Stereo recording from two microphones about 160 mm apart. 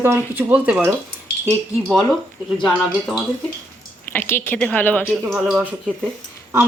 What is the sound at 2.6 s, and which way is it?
Speech, centre (ahead or behind).